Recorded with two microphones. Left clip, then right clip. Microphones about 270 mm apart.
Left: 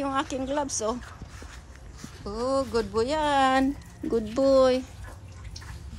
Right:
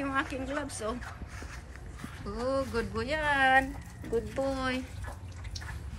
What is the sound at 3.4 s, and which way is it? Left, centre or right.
Speech, left.